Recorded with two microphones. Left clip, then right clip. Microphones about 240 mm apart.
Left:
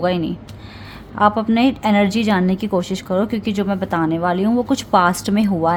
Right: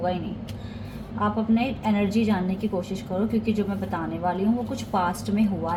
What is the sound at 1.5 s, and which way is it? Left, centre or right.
Speech, left.